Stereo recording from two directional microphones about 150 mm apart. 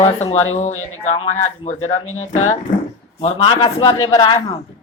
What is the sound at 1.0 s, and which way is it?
Speech, 45° left (ahead or behind).